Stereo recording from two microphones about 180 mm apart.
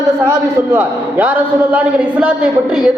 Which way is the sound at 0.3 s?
10° right (ahead or behind).